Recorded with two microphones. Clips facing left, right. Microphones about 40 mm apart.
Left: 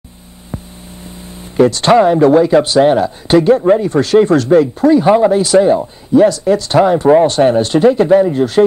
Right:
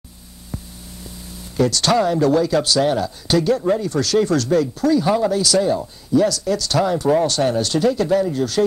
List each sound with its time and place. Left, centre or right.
1.2 s speech: left